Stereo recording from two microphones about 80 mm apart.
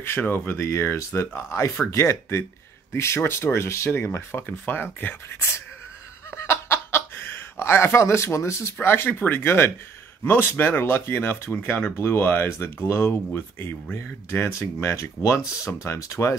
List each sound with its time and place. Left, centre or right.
0.0 s speech: left
6.3 s a sound: left
8.8 s speech: left